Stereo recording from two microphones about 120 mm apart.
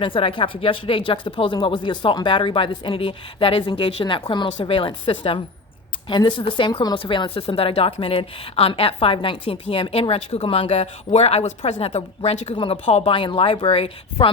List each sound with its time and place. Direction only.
0.0 s speech: 45° left (ahead or behind)
12.5 s speech: 50° left (ahead or behind)